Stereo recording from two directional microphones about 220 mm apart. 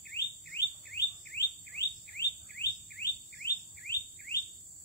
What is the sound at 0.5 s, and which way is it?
Chirp, 50° left (ahead or behind).